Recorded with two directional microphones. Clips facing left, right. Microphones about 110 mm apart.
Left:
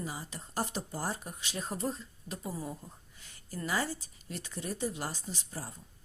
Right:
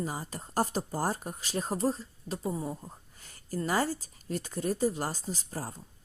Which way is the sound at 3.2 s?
45° right (ahead or behind).